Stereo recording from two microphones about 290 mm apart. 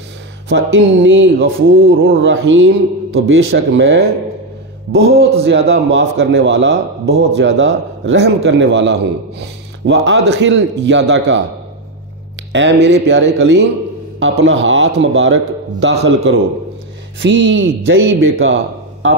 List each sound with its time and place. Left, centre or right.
0.5 s a man's voice: right
12.8 s a man's voice: right